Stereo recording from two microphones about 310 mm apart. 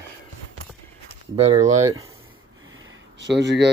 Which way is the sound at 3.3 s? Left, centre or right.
Right.